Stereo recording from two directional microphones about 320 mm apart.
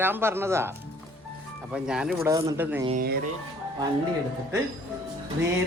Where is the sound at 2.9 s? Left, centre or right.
Right.